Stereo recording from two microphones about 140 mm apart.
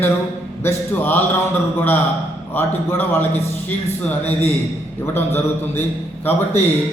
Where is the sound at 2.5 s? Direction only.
15° left (ahead or behind).